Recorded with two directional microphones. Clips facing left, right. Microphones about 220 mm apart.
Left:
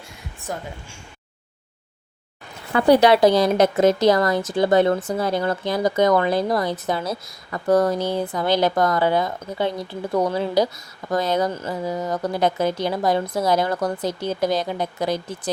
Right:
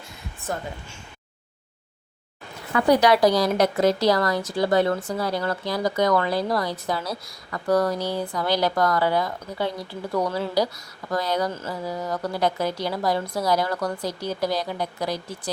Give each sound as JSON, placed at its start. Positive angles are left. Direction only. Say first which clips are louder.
{"t": 0.5, "sound": "speech", "louder": "even", "side_deg": 15}
{"t": 2.7, "sound": "a woman's voice", "louder": "left 3 dB", "side_deg": 30}